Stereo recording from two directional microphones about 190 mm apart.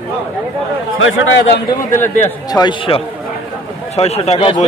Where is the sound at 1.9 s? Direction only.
10° left (ahead or behind); by 4.6 s 30° left (ahead or behind).